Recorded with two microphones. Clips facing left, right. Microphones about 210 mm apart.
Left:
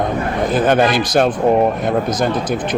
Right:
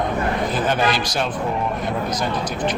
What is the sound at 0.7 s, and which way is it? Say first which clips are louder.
Speech: left 7 dB; 55° left (ahead or behind).